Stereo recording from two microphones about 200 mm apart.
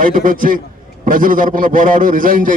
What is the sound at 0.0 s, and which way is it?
A man's voice, 40° right (ahead or behind).